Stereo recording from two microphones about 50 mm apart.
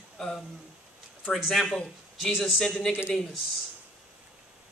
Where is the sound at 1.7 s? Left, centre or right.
Centre.